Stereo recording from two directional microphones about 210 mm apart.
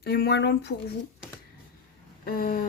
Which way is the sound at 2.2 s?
45° left (ahead or behind).